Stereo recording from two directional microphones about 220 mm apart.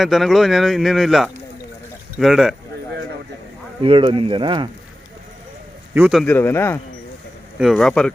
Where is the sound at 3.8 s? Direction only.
25° right (ahead or behind).